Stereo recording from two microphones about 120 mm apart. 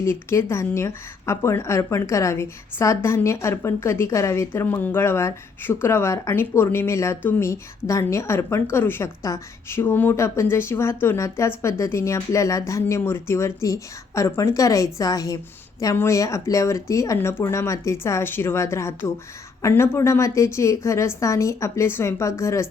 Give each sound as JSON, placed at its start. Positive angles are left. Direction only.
{"t": 0.0, "sound": "speech", "side_deg": 20}